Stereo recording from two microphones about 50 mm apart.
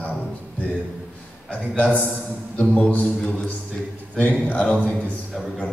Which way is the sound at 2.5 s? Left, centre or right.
Left.